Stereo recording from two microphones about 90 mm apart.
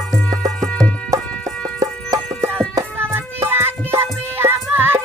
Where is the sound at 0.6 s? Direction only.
10° left (ahead or behind).